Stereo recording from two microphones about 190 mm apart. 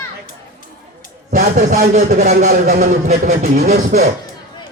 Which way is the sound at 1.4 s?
40° right (ahead or behind).